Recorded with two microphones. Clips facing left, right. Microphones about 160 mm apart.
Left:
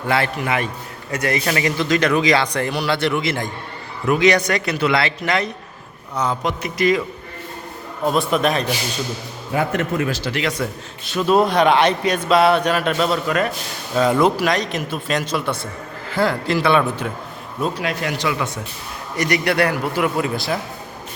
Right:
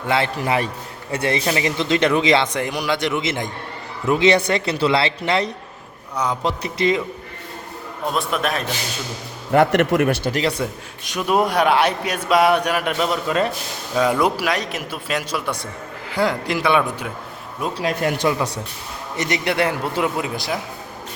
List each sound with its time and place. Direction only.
0.4 s a man's voice: 35° right (ahead or behind)
8.0 s a man's voice: centre (ahead or behind)
9.5 s a man's voice: 75° right (ahead or behind)
10.6 s a man's voice: 15° right (ahead or behind)
13.9 s a man's voice: 10° right (ahead or behind)
17.7 s a man's voice: 40° right (ahead or behind)
18.3 s a man's voice: 35° right (ahead or behind)
19.1 s speech: 25° right (ahead or behind)